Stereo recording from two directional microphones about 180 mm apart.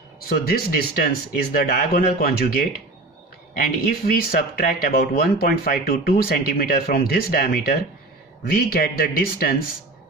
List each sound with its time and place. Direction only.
0.3 s speech: 55° left (ahead or behind)